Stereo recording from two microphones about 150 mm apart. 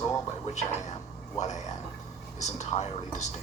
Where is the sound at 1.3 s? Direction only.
50° left (ahead or behind).